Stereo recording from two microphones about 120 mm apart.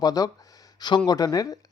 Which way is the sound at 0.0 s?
30° left (ahead or behind).